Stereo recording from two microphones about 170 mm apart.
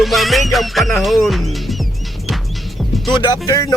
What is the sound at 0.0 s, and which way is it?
Music, centre (ahead or behind).